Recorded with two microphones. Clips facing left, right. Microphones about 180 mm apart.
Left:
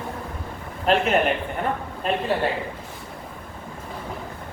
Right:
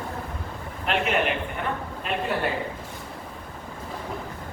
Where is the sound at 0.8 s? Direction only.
40° left (ahead or behind).